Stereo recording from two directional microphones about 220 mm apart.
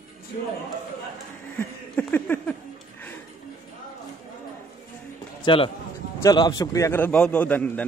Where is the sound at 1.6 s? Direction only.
5° left (ahead or behind).